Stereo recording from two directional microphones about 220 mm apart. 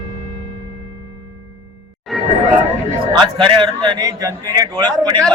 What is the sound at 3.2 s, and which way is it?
A man's voice, 20° right (ahead or behind).